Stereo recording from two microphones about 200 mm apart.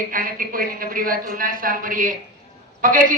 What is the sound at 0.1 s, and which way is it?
Speech, 45° right (ahead or behind).